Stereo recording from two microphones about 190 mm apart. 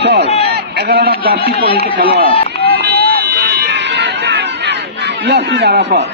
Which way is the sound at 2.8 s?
55° right (ahead or behind).